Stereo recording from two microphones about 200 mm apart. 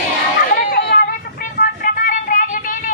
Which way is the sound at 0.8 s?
50° left (ahead or behind).